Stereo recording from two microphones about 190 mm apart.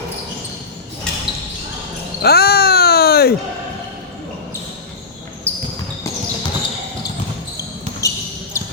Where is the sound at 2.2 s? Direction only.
55° left (ahead or behind).